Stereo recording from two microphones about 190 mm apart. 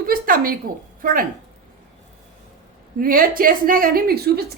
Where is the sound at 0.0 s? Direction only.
50° right (ahead or behind).